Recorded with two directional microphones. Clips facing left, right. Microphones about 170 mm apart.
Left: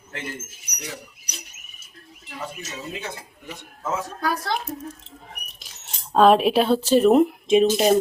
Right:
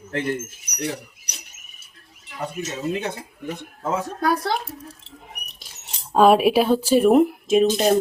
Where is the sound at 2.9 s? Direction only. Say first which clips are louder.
Right 6 dB; 55° right (ahead or behind).